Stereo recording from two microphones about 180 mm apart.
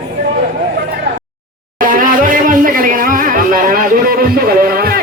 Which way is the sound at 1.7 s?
50° right (ahead or behind).